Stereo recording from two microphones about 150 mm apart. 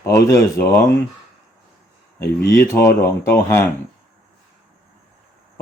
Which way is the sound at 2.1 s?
20° left (ahead or behind).